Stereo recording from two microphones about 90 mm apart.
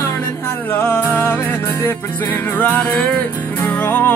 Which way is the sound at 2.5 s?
20° left (ahead or behind).